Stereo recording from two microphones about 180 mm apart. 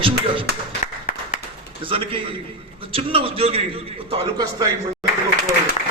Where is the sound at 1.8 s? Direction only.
30° right (ahead or behind).